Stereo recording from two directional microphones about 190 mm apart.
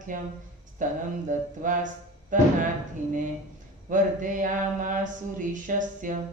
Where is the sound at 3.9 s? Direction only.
45° right (ahead or behind).